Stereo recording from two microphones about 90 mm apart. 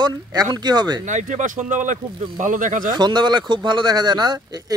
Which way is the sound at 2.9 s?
55° right (ahead or behind).